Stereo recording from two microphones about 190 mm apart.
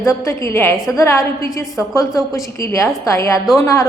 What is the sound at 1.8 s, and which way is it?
Speech, centre (ahead or behind).